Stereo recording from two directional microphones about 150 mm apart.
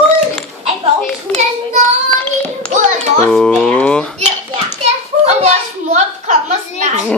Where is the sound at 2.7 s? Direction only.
50° right (ahead or behind).